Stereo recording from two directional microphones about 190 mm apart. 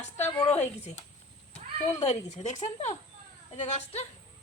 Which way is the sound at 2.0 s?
35° left (ahead or behind).